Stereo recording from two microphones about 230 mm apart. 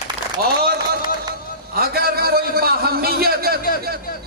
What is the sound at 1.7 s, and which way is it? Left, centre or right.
A man's voice, right.